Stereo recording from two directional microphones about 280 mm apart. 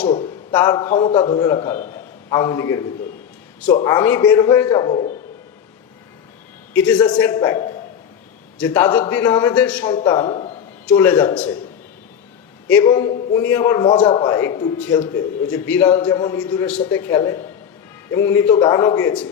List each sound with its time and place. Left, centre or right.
0.1 s a man's voice: centre
6.7 s a man's voice: centre
10.8 s a man's voice: centre
12.6 s a man's voice: centre